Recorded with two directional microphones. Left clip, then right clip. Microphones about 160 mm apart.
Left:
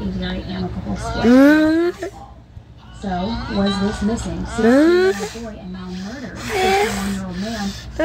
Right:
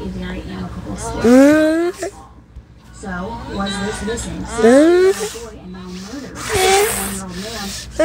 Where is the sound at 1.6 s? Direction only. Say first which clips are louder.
Right 1 dB; 10° right (ahead or behind).